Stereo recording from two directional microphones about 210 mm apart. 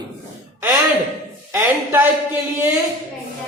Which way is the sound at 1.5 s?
10° right (ahead or behind).